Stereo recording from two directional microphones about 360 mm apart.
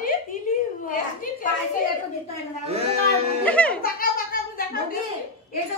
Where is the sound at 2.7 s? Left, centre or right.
Centre.